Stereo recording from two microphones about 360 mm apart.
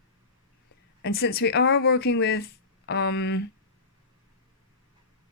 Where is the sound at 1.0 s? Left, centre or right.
Left.